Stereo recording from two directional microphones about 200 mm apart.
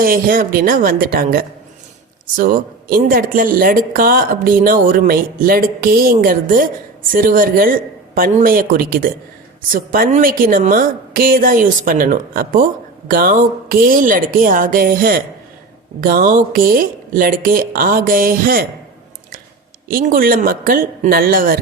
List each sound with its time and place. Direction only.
0.0 s a woman's voice: 45° right (ahead or behind)
19.9 s a woman's voice: 45° right (ahead or behind)